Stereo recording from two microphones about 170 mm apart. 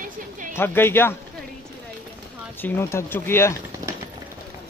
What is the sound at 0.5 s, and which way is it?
Speech, 15° left (ahead or behind).